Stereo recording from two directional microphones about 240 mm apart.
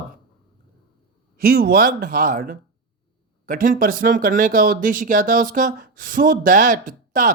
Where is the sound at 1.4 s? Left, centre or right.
Right.